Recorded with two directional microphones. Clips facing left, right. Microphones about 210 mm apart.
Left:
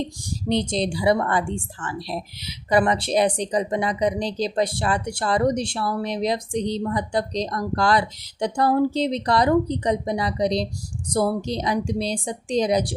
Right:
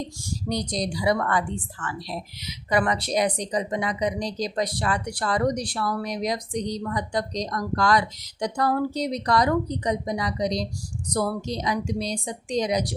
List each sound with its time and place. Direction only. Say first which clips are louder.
0.0 s a woman's voice: left 3 dB; 20° left (ahead or behind)